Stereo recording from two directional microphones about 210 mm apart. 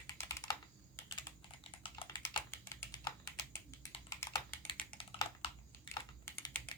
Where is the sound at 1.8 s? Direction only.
25° left (ahead or behind).